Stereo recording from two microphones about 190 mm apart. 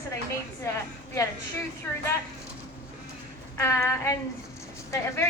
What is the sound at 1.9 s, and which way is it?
Speech, 10° left (ahead or behind).